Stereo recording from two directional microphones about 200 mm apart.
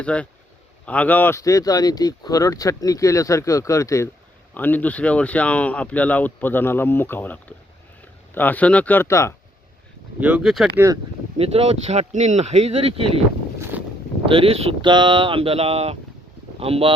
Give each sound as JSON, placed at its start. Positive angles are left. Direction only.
{"t": 0.0, "sound": "speech", "side_deg": 5}
{"t": 10.2, "sound": "speech", "side_deg": -5}
{"t": 11.3, "sound": "speech", "side_deg": -30}
{"t": 13.7, "sound": "boat", "side_deg": -10}
{"t": 14.3, "sound": "speech", "side_deg": -25}